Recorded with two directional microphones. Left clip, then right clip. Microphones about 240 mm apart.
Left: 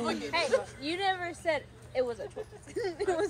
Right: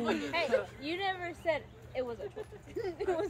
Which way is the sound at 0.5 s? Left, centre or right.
Left.